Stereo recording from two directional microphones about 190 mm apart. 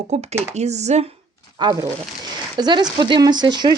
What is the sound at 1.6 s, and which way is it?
Speech, 20° right (ahead or behind).